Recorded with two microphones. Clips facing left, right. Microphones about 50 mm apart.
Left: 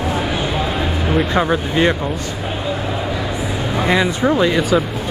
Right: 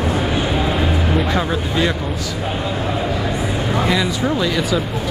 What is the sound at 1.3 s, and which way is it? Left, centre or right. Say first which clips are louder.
Speech: left 3 dB; left.